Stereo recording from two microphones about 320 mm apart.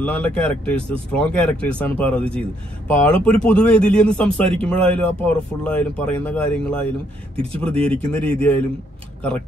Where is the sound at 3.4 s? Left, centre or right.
Centre.